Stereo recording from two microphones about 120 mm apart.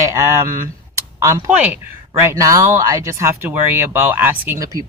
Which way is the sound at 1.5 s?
10° right (ahead or behind).